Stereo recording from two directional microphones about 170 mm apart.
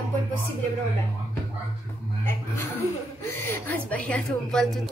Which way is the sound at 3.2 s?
15° left (ahead or behind).